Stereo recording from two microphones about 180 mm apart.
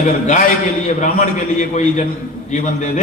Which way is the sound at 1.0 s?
40° left (ahead or behind).